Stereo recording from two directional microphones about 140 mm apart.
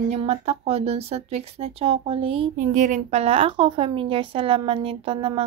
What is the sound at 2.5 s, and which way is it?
A woman's voice, 65° right (ahead or behind).